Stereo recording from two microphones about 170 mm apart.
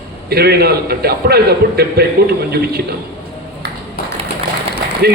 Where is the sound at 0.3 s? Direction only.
70° right (ahead or behind).